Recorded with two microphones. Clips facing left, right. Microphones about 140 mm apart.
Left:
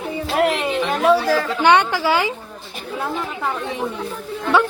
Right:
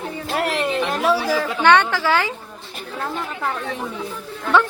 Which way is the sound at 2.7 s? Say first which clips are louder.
Left 2 dB; 5° left (ahead or behind).